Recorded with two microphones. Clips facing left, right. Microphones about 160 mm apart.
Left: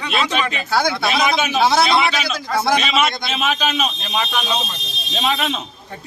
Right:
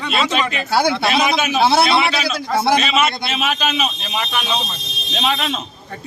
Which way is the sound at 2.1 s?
25° right (ahead or behind).